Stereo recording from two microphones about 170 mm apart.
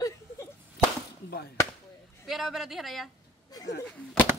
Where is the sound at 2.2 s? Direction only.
Centre (ahead or behind).